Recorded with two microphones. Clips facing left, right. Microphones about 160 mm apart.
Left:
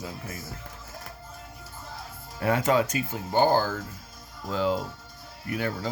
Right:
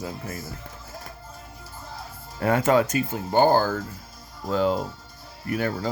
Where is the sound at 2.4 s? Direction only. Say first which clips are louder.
Right 3 dB; 50° right (ahead or behind).